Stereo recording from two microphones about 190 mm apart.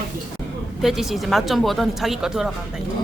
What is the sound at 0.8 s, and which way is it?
Speech, centre (ahead or behind).